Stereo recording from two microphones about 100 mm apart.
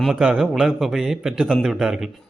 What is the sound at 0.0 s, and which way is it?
A man's voice, 5° right (ahead or behind).